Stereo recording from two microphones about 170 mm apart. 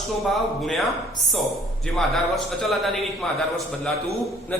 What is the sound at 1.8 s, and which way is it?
A man's voice, centre (ahead or behind).